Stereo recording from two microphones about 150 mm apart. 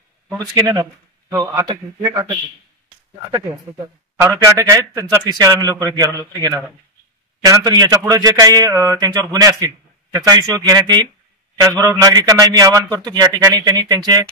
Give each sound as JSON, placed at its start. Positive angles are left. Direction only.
{"t": 0.4, "sound": "a man's voice", "side_deg": -25}
{"t": 4.5, "sound": "a man's voice", "side_deg": -20}